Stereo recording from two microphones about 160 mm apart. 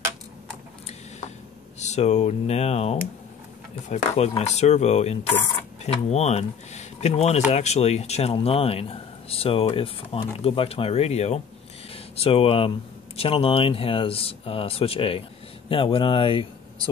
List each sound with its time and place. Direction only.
1.8 s speech: 45° left (ahead or behind)